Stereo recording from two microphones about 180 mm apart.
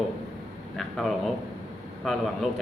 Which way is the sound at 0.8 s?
Centre (ahead or behind).